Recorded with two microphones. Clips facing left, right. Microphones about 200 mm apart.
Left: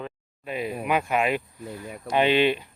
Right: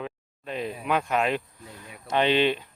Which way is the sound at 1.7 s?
50° left (ahead or behind).